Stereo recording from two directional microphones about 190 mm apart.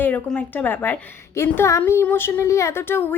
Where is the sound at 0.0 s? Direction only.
5° left (ahead or behind).